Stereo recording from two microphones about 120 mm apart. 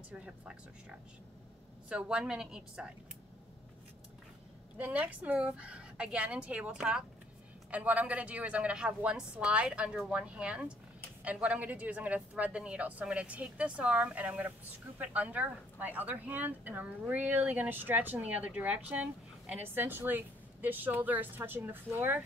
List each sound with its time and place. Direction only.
0.1 s speech: 10° right (ahead or behind)
4.7 s speech: 15° right (ahead or behind)